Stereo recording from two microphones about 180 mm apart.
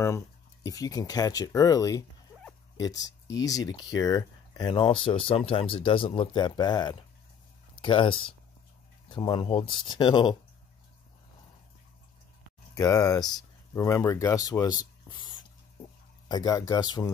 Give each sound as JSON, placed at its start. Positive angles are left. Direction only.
{"t": 0.7, "sound": "speech", "side_deg": 20}
{"t": 12.7, "sound": "speech", "side_deg": 20}